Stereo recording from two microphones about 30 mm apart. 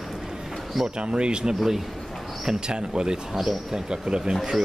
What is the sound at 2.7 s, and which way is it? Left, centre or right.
Speech, right.